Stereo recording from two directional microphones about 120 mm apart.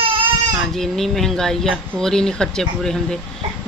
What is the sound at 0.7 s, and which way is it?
Speech, centre (ahead or behind).